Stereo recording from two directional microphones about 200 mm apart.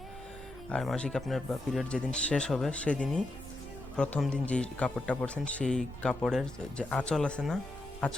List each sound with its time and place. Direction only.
0.7 s speech: 5° left (ahead or behind)